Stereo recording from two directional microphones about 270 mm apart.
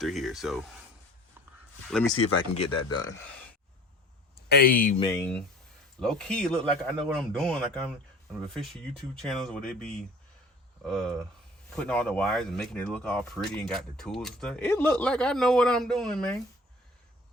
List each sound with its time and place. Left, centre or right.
0.0 s speech: centre
2.4 s speech: centre
4.4 s speech: left
4.9 s speech: centre
5.2 s speech: centre